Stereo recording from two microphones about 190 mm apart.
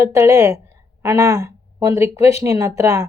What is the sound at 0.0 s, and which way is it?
A woman's voice, 15° right (ahead or behind).